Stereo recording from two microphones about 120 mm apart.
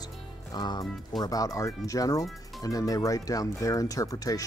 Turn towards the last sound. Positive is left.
turn(degrees=30)  # may be behind; listen again after turning